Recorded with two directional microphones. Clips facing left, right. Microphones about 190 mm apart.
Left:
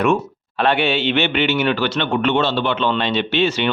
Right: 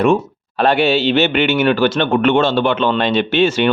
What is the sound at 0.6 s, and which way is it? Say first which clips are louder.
A man's voice: right 4 dB; 40° right (ahead or behind).